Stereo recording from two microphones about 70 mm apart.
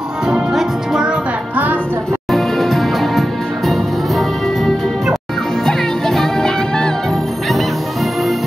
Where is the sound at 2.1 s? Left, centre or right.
Centre.